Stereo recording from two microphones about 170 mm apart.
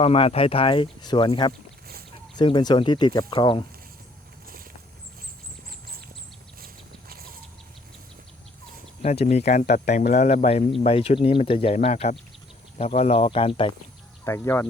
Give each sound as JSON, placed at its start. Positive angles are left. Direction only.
{"t": 0.0, "sound": "speech", "side_deg": 35}
{"t": 9.0, "sound": "speech", "side_deg": 40}
{"t": 14.3, "sound": "speech", "side_deg": 15}